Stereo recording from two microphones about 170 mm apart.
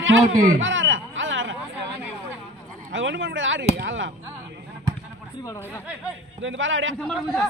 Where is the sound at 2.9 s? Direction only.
90° right.